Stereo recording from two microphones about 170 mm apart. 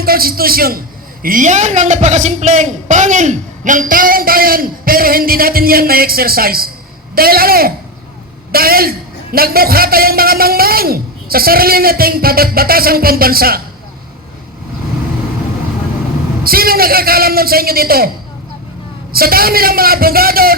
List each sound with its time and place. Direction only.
0.0 s a man's voice: 60° right (ahead or behind)
16.4 s a man's voice: 60° right (ahead or behind)
19.1 s a man's voice: 60° right (ahead or behind)